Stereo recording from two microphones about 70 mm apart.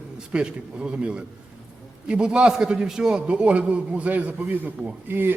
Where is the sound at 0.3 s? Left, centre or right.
Centre.